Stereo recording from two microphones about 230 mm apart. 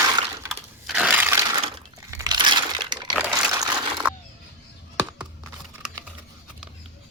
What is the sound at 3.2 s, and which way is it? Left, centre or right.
Crumpling, centre.